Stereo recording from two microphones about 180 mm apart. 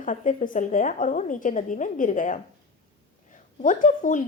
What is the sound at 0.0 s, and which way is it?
Speech, 45° left (ahead or behind).